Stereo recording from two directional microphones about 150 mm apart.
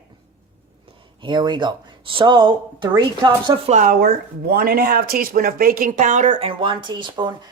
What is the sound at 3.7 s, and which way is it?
Speech, 60° right (ahead or behind).